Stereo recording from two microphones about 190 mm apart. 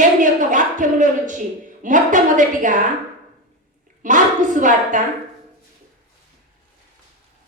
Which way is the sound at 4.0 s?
40° right (ahead or behind).